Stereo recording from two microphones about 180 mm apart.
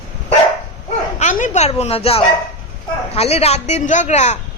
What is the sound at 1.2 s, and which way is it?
A woman's voice, 40° left (ahead or behind).